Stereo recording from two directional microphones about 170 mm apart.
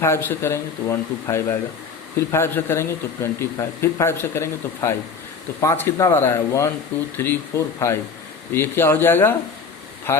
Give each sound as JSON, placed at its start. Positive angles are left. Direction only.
{"t": 0.0, "sound": "a man's voice", "side_deg": 15}